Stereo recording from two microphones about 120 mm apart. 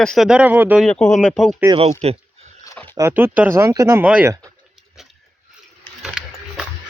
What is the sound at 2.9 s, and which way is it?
Speech, 20° right (ahead or behind).